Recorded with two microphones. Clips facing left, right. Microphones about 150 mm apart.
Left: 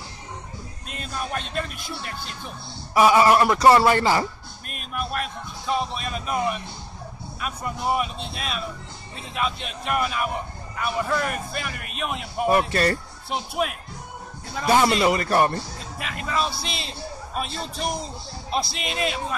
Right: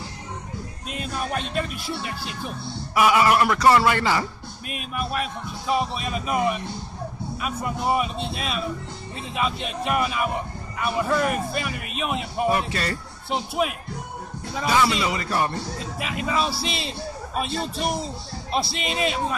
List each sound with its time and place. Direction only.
0.8 s speech: 5° right (ahead or behind)
2.9 s speech: 30° left (ahead or behind)
4.6 s speech: 5° right (ahead or behind)
12.4 s a man's voice: 45° left (ahead or behind)
13.3 s speech: centre (ahead or behind)
14.7 s a man's voice: 45° left (ahead or behind)
16.0 s speech: centre (ahead or behind)